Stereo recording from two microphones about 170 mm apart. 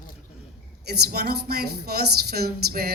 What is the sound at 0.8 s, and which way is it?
A woman's voice, 65° right (ahead or behind).